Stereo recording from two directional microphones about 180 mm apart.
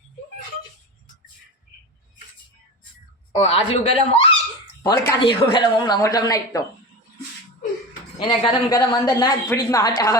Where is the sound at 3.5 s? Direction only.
35° left (ahead or behind).